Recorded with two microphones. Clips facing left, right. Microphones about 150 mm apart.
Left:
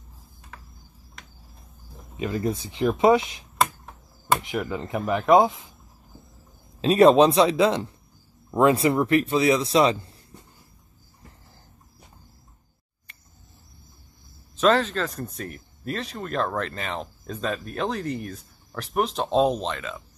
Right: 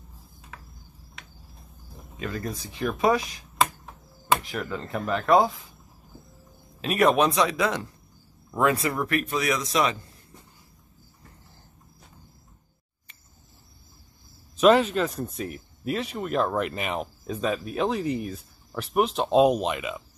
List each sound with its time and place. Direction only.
2.1 s speech: 20° left (ahead or behind)
3.5 s a sound: centre (ahead or behind)
4.4 s speech: 20° left (ahead or behind)
6.8 s speech: 30° left (ahead or behind)
14.6 s speech: 10° right (ahead or behind)